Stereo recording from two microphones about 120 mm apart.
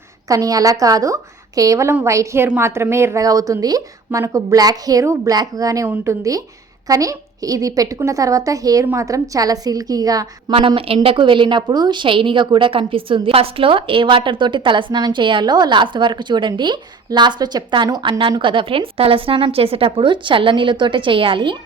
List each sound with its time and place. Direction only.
0.3 s a woman's voice: 30° right (ahead or behind)
10.5 s a woman's voice: 45° right (ahead or behind)
18.2 s a woman's voice: 45° right (ahead or behind)